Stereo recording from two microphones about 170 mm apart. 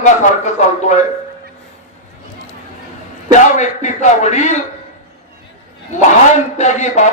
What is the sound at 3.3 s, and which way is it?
A man's voice, 45° left (ahead or behind).